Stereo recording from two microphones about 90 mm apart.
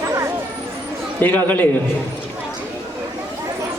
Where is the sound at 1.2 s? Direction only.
20° left (ahead or behind).